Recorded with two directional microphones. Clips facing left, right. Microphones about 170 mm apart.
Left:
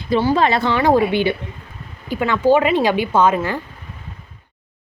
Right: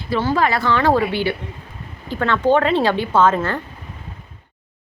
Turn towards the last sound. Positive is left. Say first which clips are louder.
# even
turn(degrees=15)  # may be behind; listen again after turning